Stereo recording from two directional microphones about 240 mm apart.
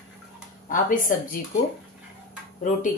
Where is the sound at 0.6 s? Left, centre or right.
Left.